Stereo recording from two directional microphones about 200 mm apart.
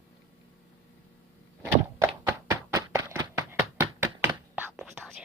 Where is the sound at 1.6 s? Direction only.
15° right (ahead or behind).